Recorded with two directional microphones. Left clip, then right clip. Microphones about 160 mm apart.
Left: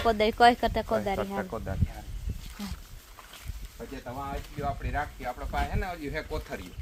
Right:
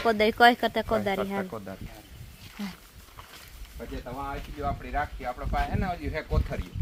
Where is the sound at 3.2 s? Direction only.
20° left (ahead or behind).